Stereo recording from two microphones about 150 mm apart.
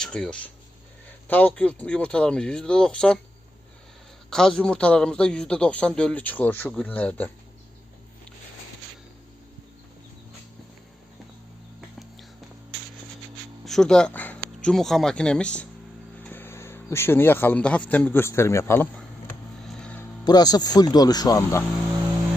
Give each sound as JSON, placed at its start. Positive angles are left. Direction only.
{"t": 0.0, "sound": "a man's voice", "side_deg": 5}
{"t": 4.3, "sound": "a man's voice", "side_deg": 5}
{"t": 13.7, "sound": "speech", "side_deg": 5}
{"t": 19.6, "sound": "vehicle", "side_deg": 10}
{"t": 20.2, "sound": "speech", "side_deg": 25}